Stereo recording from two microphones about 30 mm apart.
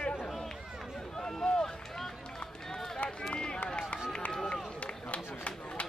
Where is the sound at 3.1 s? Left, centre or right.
Left.